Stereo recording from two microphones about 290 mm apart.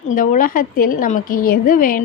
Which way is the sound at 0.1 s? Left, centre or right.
Left.